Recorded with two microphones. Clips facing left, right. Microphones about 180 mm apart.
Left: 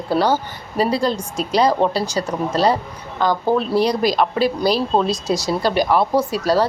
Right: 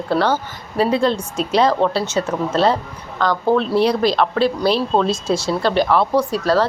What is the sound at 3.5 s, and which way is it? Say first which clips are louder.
A woman's voice: right 1 dB; 5° left (ahead or behind).